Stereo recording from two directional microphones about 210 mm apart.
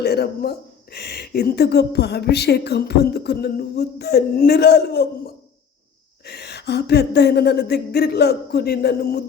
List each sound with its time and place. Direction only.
0.0 s speech: 50° left (ahead or behind)